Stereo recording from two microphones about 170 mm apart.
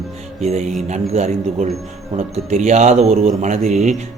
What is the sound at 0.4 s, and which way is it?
A man's voice, 40° right (ahead or behind).